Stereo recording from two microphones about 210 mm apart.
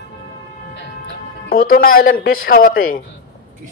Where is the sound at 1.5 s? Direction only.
45° left (ahead or behind).